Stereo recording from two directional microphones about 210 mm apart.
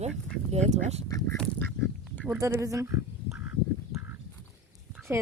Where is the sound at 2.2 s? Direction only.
10° right (ahead or behind).